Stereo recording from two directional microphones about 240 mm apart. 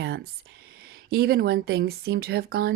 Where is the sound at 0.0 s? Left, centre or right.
Right.